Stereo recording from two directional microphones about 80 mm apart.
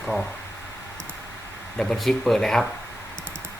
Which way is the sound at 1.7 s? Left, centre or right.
Centre.